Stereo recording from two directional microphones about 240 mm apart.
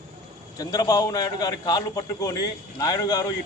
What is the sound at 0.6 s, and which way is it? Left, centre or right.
A man's voice, centre.